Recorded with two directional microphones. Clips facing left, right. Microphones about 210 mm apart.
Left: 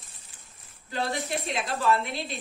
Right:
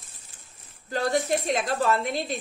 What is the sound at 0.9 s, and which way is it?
A woman's voice, 45° right (ahead or behind).